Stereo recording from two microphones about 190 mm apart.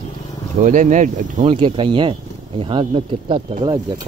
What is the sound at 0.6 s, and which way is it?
Speech, 40° right (ahead or behind).